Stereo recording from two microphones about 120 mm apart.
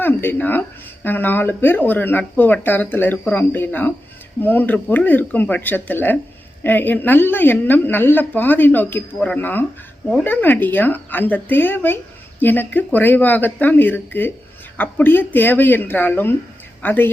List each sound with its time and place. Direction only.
0.0 s speech: 15° left (ahead or behind)